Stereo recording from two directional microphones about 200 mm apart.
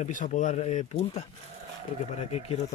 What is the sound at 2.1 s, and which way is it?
Speech, 30° left (ahead or behind).